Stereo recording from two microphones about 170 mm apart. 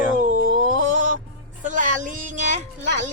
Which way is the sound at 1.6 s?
50° right (ahead or behind).